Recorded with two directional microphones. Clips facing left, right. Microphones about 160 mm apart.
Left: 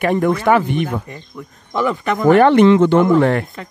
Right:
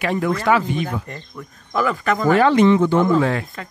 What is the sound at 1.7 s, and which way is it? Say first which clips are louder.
Speech: left 1 dB; 20° left (ahead or behind).